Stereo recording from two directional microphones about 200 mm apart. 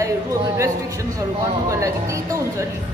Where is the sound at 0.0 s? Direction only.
15° right (ahead or behind).